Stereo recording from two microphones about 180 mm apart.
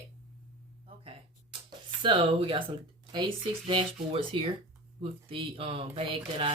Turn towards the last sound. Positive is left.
turn(degrees=-30)  # may be behind; listen again after turning